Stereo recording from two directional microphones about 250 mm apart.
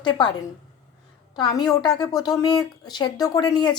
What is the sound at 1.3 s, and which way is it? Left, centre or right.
A woman's voice, centre.